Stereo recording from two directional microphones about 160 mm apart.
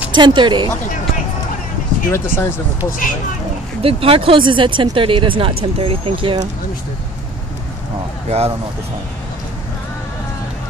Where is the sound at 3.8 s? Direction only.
35° right (ahead or behind).